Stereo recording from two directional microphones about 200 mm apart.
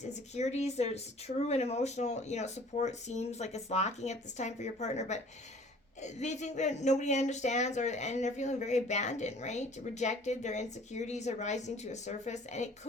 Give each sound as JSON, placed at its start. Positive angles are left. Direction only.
{"t": 0.0, "sound": "a woman's voice", "side_deg": 35}